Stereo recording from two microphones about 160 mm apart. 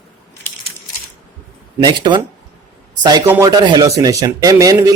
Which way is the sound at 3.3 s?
20° right (ahead or behind).